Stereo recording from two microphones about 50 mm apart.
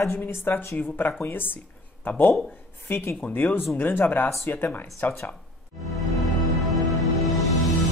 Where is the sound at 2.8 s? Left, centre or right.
Left.